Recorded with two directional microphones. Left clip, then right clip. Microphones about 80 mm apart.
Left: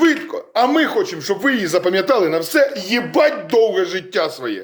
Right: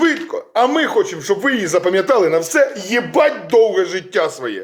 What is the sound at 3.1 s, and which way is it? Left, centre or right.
Music, left.